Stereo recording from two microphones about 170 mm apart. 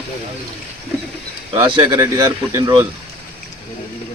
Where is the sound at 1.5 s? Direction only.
25° right (ahead or behind).